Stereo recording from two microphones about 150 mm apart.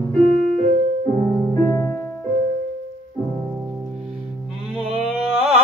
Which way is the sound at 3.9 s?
5° right (ahead or behind).